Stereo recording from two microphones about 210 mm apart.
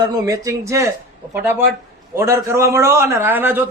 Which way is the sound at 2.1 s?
10° right (ahead or behind).